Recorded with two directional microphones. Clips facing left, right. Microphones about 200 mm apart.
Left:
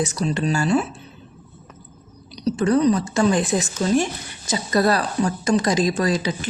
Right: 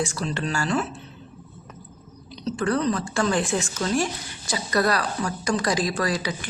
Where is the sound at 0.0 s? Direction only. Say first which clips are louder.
Left 5 dB; 20° left (ahead or behind).